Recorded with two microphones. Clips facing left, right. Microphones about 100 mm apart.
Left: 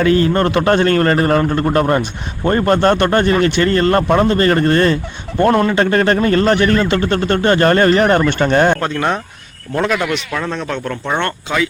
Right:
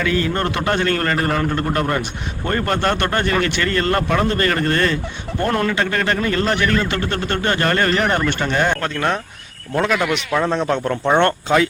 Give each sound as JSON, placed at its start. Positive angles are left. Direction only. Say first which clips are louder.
{"t": 0.0, "sound": "a man's voice", "louder": "left 7 dB", "side_deg": 35}
{"t": 0.6, "sound": "a man's voice", "louder": "left 6 dB", "side_deg": 40}
{"t": 8.8, "sound": "speech", "louder": "left 3 dB", "side_deg": 10}
{"t": 10.4, "sound": "a man's voice", "louder": "right 3 dB", "side_deg": -20}
{"t": 11.2, "sound": "speech", "louder": "right 3 dB", "side_deg": -40}